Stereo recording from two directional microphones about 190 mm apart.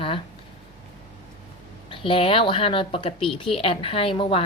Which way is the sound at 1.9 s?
30° left (ahead or behind).